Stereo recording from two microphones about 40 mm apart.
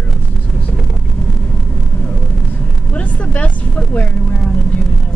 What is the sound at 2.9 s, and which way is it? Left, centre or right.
Speech, left.